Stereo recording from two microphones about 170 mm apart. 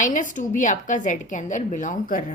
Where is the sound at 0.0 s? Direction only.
50° left (ahead or behind).